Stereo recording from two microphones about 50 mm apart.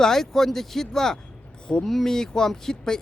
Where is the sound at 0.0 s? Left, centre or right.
Centre.